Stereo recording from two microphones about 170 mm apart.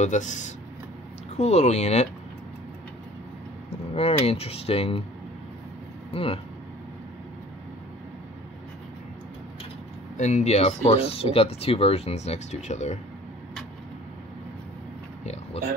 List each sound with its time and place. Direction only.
0.0 s speech: 45° left (ahead or behind)
3.9 s speech: 35° left (ahead or behind)
6.1 s speech: 35° left (ahead or behind)
10.1 s speech: 45° left (ahead or behind)